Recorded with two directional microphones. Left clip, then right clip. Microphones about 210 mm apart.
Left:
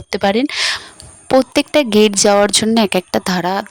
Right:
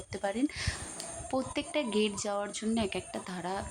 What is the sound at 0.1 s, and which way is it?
Speech, 50° left (ahead or behind).